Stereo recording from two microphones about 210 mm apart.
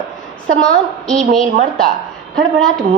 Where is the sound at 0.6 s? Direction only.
5° left (ahead or behind).